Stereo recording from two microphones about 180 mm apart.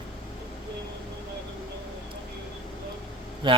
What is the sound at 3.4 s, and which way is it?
Speech, 25° right (ahead or behind).